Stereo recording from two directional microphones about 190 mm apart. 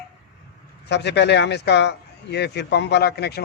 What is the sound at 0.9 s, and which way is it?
Speech, 65° left (ahead or behind).